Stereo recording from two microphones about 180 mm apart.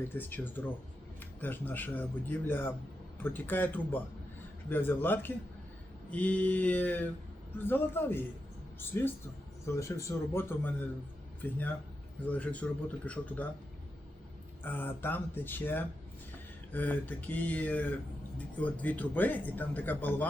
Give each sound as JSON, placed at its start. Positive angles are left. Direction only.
{"t": 0.2, "sound": "speech", "side_deg": 10}
{"t": 14.6, "sound": "speech", "side_deg": 10}